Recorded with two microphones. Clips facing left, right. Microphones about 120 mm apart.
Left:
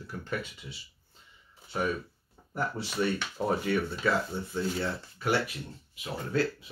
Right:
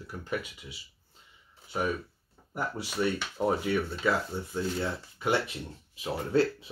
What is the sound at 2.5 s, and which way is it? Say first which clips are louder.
Speech: left 1 dB; 10° right (ahead or behind).